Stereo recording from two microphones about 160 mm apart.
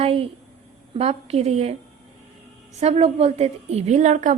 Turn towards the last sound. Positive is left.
turn(degrees=-50)  # may be behind; listen again after turning